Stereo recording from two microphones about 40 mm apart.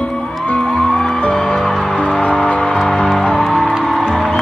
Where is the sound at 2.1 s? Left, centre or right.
Left.